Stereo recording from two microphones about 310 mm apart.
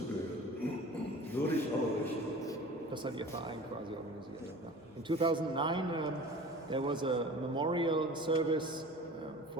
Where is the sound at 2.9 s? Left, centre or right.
Centre.